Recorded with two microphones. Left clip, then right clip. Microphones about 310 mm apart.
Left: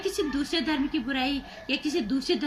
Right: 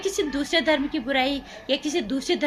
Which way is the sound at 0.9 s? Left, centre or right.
Right.